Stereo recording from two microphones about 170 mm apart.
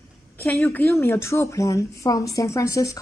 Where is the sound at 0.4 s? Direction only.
15° left (ahead or behind).